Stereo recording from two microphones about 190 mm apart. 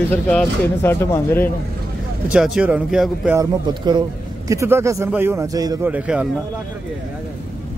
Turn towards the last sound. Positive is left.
turn(degrees=-10)  # may be behind; listen again after turning